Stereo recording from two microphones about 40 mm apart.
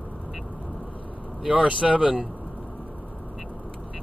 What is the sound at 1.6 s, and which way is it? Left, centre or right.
Speech, right.